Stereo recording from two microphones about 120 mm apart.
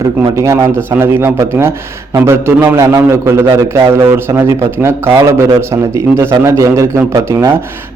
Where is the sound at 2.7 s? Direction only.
25° right (ahead or behind).